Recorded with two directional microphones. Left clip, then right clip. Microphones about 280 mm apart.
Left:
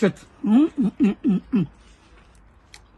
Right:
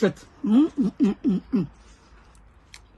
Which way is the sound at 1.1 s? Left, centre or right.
Centre.